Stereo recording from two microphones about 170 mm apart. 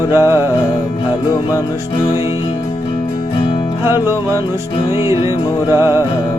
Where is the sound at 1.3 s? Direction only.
20° left (ahead or behind).